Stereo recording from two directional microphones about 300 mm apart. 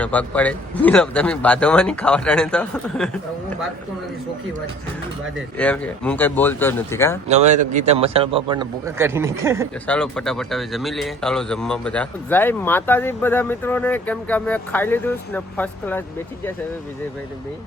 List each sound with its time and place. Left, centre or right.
0.0 s speech: centre
5.5 s speech: centre
7.3 s a man's voice: right
9.8 s speech: centre